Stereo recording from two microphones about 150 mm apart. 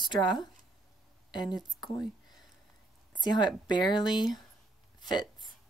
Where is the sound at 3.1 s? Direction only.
30° left (ahead or behind).